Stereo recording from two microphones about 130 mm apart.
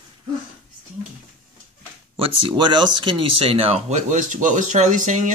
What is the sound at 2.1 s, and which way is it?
Speech, 40° right (ahead or behind).